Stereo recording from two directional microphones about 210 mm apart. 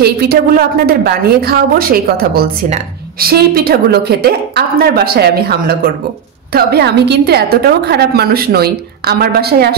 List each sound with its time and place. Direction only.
0.0 s a woman's voice: 45° right (ahead or behind)